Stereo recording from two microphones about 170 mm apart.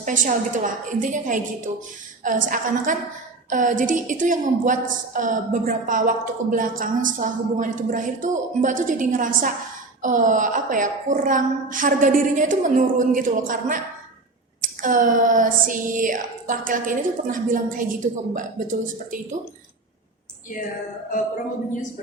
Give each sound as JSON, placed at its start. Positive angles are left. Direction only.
{"t": 0.0, "sound": "a woman's voice", "side_deg": -50}